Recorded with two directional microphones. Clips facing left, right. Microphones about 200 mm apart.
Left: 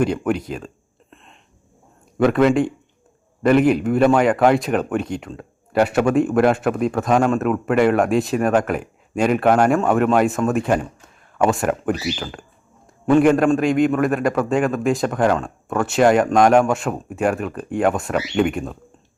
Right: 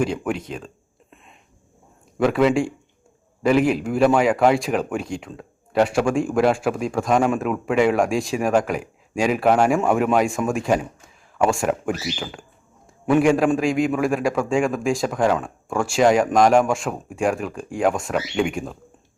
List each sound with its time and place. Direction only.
0.0 s a man's voice: centre (ahead or behind)
1.1 s a sound: 5° right (ahead or behind)
2.1 s a man's voice: centre (ahead or behind)
15.9 s a man's voice: 5° left (ahead or behind)